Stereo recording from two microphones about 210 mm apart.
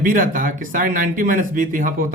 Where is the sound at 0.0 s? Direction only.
40° right (ahead or behind).